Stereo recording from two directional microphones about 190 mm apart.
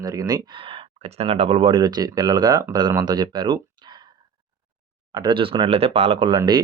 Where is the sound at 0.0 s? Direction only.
20° right (ahead or behind).